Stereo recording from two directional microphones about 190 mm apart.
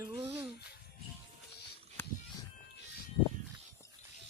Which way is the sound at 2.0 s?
10° left (ahead or behind).